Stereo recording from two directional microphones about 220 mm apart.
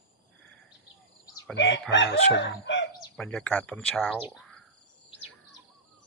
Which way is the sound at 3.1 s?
5° left (ahead or behind).